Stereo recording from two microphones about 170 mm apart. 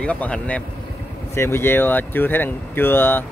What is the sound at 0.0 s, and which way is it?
Speech, 5° left (ahead or behind).